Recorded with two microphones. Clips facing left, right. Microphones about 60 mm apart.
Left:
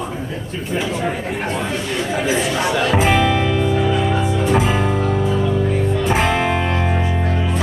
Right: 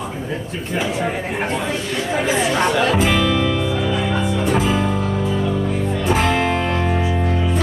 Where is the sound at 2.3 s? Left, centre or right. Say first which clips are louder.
Right 2 dB; centre.